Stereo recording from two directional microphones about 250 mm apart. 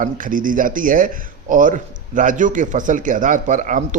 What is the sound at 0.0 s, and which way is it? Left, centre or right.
Speech, right.